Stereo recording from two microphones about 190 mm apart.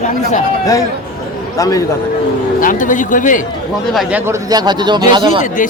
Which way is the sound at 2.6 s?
45° left (ahead or behind).